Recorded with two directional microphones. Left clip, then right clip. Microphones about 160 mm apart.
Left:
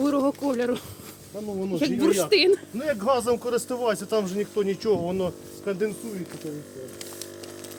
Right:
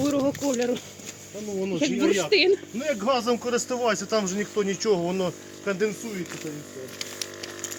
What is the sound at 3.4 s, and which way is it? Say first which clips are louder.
Speech: even; 85° left.